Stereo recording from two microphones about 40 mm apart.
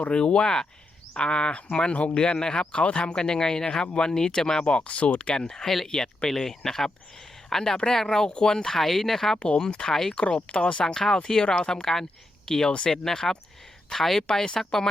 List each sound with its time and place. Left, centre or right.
0.1 s speech: left
5.3 s speech: centre
10.2 s speech: left
10.8 s speech: centre